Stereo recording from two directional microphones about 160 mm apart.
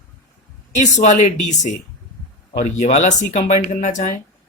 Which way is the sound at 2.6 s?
45° left (ahead or behind).